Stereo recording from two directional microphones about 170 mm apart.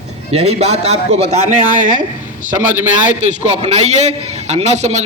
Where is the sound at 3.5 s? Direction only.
40° right (ahead or behind).